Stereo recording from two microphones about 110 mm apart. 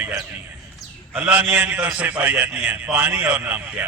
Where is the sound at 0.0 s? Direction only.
25° right (ahead or behind).